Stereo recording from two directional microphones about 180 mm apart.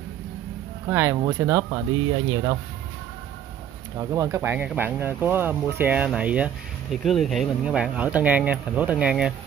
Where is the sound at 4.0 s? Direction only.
20° right (ahead or behind).